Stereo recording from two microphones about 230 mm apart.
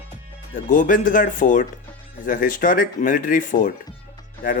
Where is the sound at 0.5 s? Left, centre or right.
Left.